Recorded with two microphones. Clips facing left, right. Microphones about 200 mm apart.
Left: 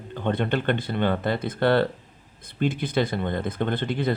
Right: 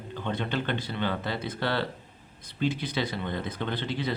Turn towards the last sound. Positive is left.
turn(degrees=50)  # may be behind; listen again after turning